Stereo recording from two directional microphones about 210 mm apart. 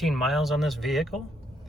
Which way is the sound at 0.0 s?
Centre (ahead or behind).